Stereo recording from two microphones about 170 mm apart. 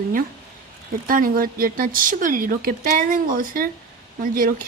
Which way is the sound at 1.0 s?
55° right (ahead or behind).